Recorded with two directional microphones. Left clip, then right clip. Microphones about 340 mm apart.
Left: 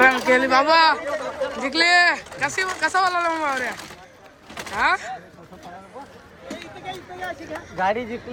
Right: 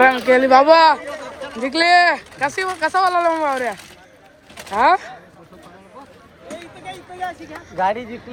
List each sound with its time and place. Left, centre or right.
0.0 s speech: centre
1.0 s chatter: centre
1.6 s speech: centre
7.5 s speech: centre